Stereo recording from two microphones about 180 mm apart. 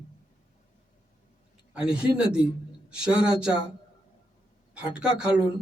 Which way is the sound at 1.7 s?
5° right (ahead or behind).